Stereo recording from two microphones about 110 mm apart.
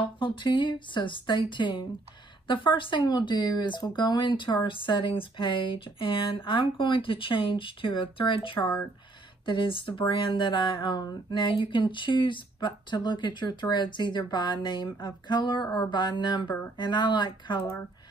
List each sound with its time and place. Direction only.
0.2 s speech: 45° left (ahead or behind)